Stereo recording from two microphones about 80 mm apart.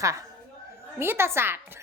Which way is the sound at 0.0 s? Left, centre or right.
Right.